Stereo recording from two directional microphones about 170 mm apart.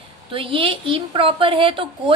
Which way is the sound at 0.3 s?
30° right (ahead or behind).